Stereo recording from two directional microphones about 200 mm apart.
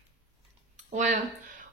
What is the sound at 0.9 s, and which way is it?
Speech, 40° right (ahead or behind).